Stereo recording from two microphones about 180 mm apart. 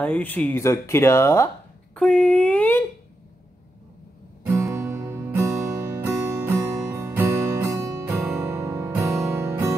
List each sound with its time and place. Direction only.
0.0 s speech: 10° left (ahead or behind)
4.5 s music: 15° right (ahead or behind)